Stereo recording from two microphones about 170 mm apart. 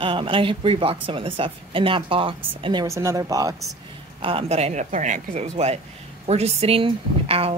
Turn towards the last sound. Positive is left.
turn(degrees=-35)  # may be behind; listen again after turning